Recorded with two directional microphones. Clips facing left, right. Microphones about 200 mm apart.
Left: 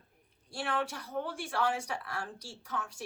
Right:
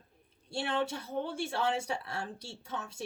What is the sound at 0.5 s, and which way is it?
Speech, 25° right (ahead or behind).